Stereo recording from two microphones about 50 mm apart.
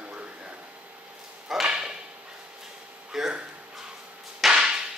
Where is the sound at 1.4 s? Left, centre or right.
Centre.